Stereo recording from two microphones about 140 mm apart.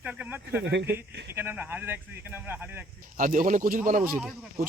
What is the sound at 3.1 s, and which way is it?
Speech, 70° right (ahead or behind).